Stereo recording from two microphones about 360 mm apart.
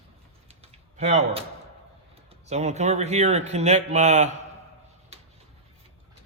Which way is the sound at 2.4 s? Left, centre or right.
Centre.